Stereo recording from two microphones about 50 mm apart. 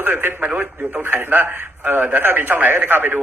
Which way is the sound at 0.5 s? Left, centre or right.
Right.